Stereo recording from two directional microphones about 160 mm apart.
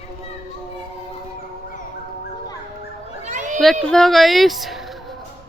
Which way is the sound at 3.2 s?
50° right (ahead or behind).